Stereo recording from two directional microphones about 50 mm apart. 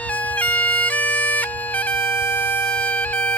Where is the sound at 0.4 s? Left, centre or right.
Left.